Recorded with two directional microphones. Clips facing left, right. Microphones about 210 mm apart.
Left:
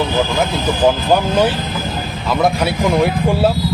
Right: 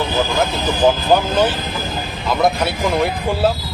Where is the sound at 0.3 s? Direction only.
Centre (ahead or behind).